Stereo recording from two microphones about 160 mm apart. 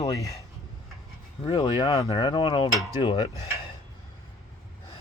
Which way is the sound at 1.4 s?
30° left (ahead or behind).